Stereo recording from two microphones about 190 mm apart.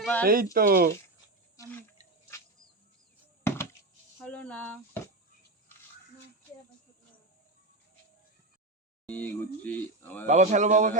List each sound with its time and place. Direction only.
0.0 s speech: 5° left (ahead or behind)
0.5 s speech: 50° right (ahead or behind)
3.4 s a sound: 15° left (ahead or behind)
4.2 s speech: 5° left (ahead or behind)
9.0 s speech: 10° left (ahead or behind)
10.2 s speech: 40° right (ahead or behind)